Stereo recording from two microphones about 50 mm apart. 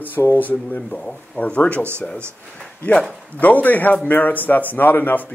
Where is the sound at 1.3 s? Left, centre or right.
Left.